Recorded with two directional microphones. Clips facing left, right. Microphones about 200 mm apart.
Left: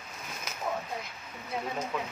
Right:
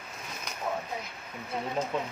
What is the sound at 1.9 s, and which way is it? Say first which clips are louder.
Speech: right 2 dB; 25° right (ahead or behind).